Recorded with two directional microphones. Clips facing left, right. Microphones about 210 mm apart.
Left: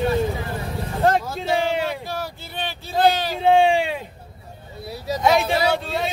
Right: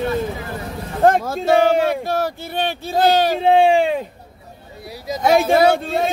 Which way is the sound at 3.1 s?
50° right (ahead or behind).